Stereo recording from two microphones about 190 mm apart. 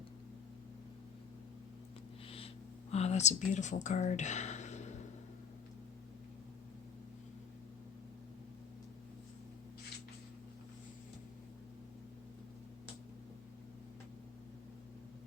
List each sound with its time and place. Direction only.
2.9 s speech: 35° left (ahead or behind)